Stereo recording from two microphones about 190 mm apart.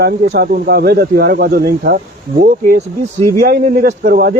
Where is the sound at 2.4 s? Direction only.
40° right (ahead or behind).